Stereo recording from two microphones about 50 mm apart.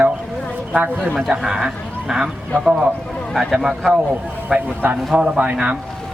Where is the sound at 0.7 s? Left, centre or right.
Right.